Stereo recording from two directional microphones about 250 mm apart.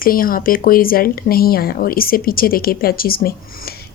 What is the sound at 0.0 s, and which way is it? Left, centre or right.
Speech, left.